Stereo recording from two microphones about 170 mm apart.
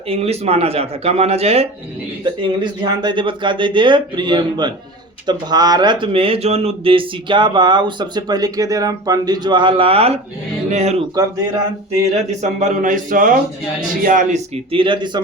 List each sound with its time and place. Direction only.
0.1 s speech: 35° right (ahead or behind)
12.4 s speech: 45° right (ahead or behind); by 15.2 s 25° right (ahead or behind)